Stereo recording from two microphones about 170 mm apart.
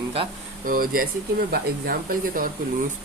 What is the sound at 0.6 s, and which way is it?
Speech, 55° right (ahead or behind).